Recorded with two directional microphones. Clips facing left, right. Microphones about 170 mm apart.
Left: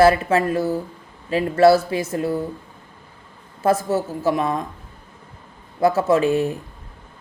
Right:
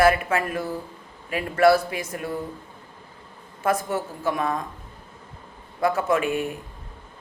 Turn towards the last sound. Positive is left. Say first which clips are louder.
# left 6 dB
turn(degrees=30)  # may be behind; listen again after turning